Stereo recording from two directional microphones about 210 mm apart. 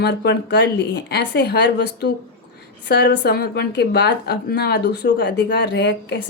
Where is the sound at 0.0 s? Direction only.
50° left (ahead or behind).